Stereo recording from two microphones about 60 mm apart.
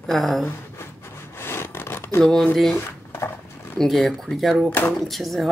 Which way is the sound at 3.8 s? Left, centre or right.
Centre.